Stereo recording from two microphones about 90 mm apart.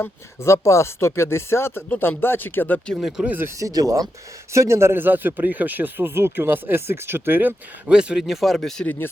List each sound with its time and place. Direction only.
0.0 s speech: 30° left (ahead or behind)
2.9 s speech: 5° right (ahead or behind)
3.2 s a man's voice: 20° right (ahead or behind)
3.6 s a man's voice: 40° right (ahead or behind); by 7.5 s 20° right (ahead or behind)
7.9 s speech: 10° right (ahead or behind)